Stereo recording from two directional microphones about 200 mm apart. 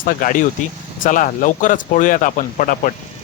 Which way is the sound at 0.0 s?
45° left (ahead or behind).